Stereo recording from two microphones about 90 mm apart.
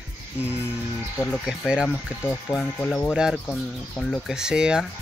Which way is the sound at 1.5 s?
10° right (ahead or behind).